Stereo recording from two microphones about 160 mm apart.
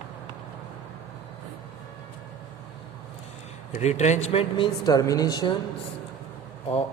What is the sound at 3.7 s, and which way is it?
Speech, 45° left (ahead or behind).